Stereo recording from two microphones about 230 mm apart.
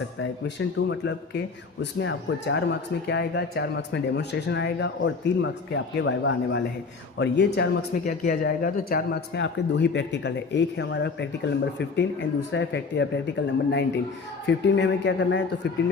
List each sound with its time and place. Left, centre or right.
0.2 s speech: left